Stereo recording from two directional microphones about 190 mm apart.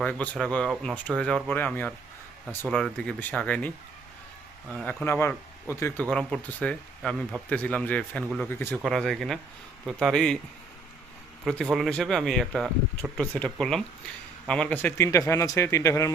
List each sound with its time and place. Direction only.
0.0 s speech: 5° left (ahead or behind)
4.7 s speech: centre (ahead or behind)
5.0 s speech: 10° left (ahead or behind)
11.4 s speech: centre (ahead or behind)